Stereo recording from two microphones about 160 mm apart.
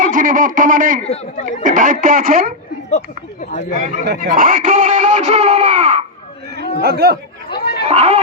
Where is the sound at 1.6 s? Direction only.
55° right (ahead or behind).